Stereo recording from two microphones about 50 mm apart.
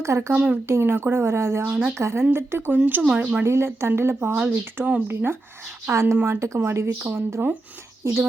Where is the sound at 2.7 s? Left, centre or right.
Right.